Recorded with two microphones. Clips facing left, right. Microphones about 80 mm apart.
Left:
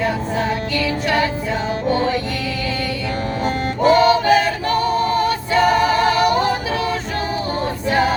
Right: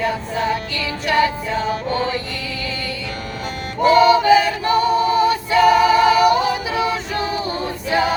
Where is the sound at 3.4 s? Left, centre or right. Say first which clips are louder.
Left 1 dB; left.